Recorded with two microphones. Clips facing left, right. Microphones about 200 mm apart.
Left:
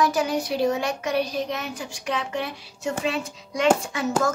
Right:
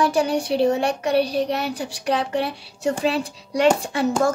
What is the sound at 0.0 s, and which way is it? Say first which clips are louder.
Music: right 3 dB; 30° right (ahead or behind).